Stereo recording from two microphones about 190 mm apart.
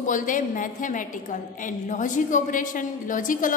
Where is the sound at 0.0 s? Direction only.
45° left (ahead or behind).